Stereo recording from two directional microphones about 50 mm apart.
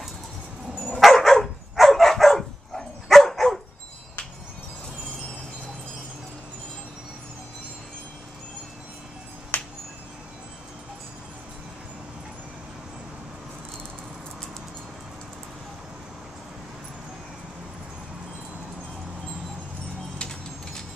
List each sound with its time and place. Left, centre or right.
0.7 s dog: centre
9.5 s music: left
20.2 s a sound: centre